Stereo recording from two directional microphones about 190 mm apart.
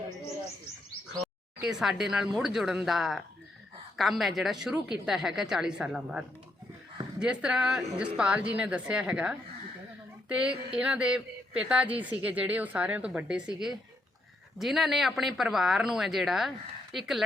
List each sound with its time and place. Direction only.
1.2 s a woman's voice: centre (ahead or behind)